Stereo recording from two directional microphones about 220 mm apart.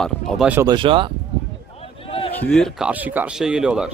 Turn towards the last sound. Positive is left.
turn(degrees=-5)  # may be behind; listen again after turning